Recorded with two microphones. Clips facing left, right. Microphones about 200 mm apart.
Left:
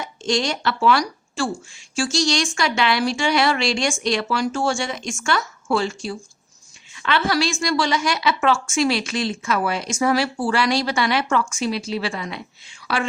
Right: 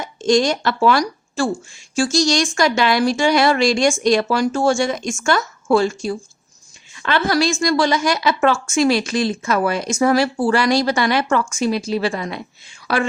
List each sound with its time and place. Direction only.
0.0 s a woman's voice: 45° right (ahead or behind)